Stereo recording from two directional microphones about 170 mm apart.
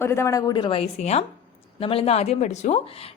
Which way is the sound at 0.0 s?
15° left (ahead or behind).